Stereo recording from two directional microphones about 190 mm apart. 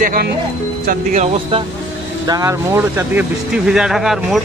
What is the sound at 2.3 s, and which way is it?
Speech, 15° right (ahead or behind).